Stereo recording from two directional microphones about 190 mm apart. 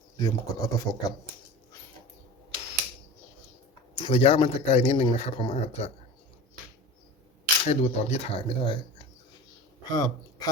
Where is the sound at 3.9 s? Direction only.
30° left (ahead or behind).